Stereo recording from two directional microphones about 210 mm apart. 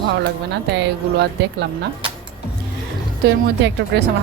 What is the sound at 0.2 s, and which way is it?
Speech, 55° right (ahead or behind).